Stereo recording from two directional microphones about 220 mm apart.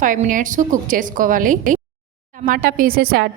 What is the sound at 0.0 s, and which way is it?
A woman's voice, 35° right (ahead or behind).